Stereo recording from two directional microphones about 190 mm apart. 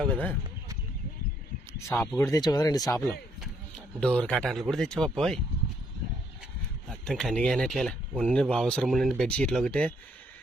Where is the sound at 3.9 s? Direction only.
5° left (ahead or behind).